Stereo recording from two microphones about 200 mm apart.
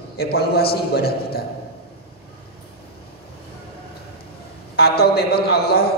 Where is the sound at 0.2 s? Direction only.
50° left (ahead or behind).